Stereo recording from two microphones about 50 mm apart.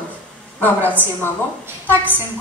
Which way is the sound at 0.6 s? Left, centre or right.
Left.